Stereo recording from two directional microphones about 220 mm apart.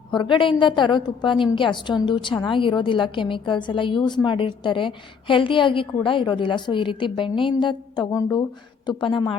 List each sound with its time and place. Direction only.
0.1 s a woman's voice: 20° left (ahead or behind)